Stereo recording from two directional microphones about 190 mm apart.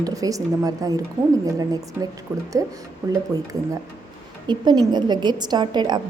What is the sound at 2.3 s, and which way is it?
Speech, 15° right (ahead or behind).